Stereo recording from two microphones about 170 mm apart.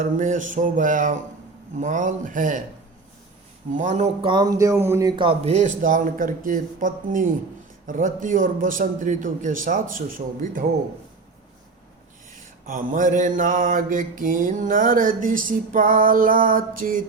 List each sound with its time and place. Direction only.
0.0 s mantra: 50° right (ahead or behind)
3.8 s speech: 40° right (ahead or behind)
7.9 s mantra: 50° right (ahead or behind)
12.6 s mantra: 50° right (ahead or behind)